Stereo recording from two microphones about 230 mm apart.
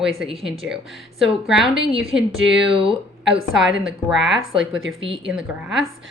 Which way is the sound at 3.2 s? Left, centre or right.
Centre.